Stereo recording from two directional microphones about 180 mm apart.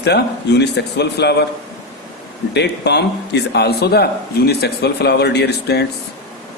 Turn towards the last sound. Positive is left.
turn(degrees=65)  # may be behind; listen again after turning